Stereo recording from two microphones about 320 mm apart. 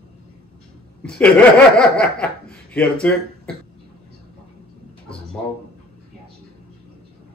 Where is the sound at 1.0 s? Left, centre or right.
Centre.